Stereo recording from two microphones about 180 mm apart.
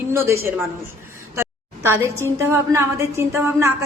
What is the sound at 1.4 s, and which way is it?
A woman's voice, 15° right (ahead or behind).